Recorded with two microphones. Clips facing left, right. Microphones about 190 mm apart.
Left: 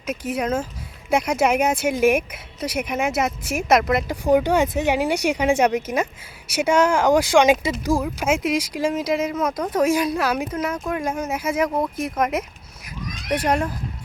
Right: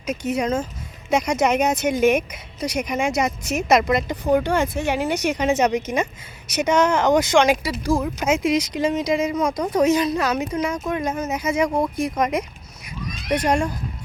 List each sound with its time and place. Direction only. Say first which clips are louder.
0.0 s speech: right 2 dB; 5° left (ahead or behind)
7.4 s speech: left 2 dB; 20° left (ahead or behind)
8.0 s speech: right 1 dB; 5° left (ahead or behind)